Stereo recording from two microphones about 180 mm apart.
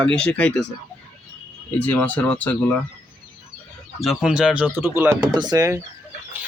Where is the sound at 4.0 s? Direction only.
Centre (ahead or behind); by 5.8 s 20° right (ahead or behind).